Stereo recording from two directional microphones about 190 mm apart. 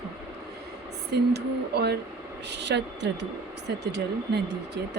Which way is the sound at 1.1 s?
60° right (ahead or behind).